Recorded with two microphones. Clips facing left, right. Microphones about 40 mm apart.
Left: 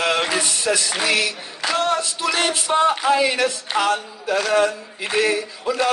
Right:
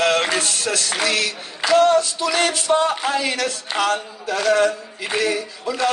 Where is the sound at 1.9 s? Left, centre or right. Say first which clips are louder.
Right 4 dB; left.